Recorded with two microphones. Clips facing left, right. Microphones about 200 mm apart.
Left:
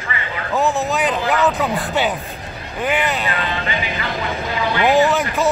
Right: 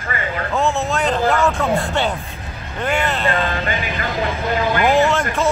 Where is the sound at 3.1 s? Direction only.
5° left (ahead or behind).